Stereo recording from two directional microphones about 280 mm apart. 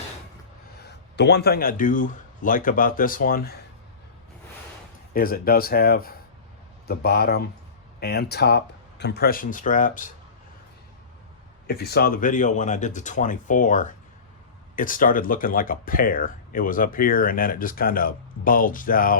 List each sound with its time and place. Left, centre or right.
0.9 s speech: left
5.1 s speech: left
11.7 s speech: left